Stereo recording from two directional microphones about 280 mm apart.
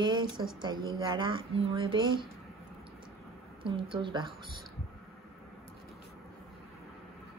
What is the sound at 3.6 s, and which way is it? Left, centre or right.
Speech, centre.